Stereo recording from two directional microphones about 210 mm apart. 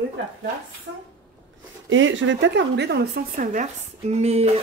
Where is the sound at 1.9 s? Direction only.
65° right (ahead or behind).